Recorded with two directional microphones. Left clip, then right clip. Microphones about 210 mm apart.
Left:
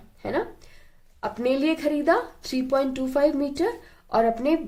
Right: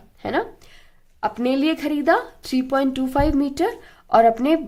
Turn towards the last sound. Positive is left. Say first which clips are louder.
# right 6 dB
turn(degrees=-35)  # may be behind; listen again after turning